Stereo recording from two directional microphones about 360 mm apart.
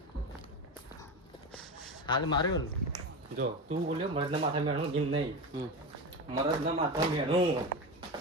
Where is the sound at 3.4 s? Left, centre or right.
Centre.